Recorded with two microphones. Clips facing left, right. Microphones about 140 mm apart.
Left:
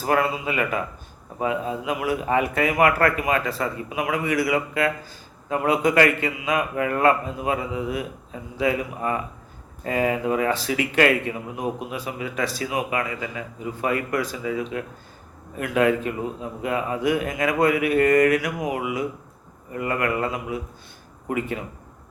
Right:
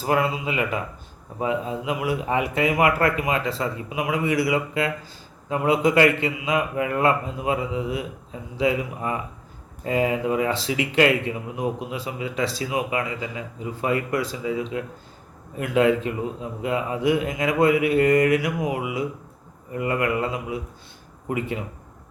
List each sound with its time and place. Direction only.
0.0 s a man's voice: 20° right (ahead or behind)
9.8 s a man's voice: 20° right (ahead or behind)